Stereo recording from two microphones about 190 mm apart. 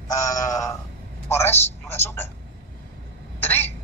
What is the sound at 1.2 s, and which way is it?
Speech, 15° left (ahead or behind).